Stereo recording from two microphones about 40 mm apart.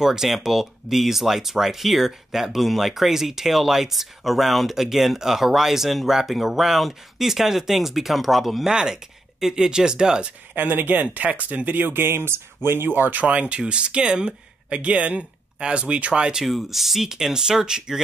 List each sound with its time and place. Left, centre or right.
0.0 s speech: centre
8.6 s speech: centre
10.5 s speech: right
13.2 s speech: right
16.4 s speech: centre